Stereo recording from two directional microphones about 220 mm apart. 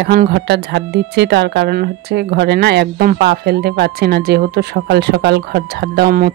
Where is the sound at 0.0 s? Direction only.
45° right (ahead or behind).